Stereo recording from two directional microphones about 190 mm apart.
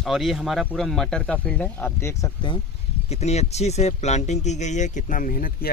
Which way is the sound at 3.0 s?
35° left (ahead or behind).